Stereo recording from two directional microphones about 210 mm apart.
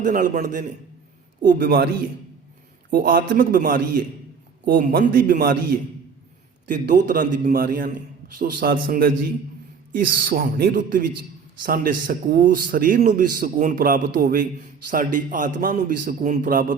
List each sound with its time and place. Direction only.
0.0 s a man's voice: 40° right (ahead or behind)
2.9 s speech: 45° right (ahead or behind)
6.7 s a man's voice: 40° right (ahead or behind)